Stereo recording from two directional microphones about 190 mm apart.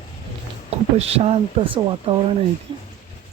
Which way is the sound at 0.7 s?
30° right (ahead or behind).